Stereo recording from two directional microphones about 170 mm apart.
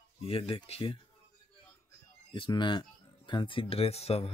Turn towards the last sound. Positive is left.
turn(degrees=35)  # may be behind; listen again after turning